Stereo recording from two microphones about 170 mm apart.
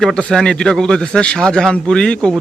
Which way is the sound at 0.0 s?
5° left (ahead or behind).